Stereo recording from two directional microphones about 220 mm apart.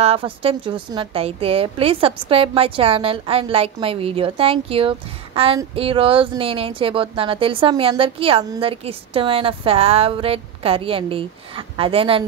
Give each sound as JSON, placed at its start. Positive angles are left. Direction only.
{"t": 0.0, "sound": "a woman's voice", "side_deg": -25}